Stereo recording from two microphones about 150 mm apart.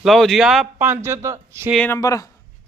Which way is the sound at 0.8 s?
15° right (ahead or behind).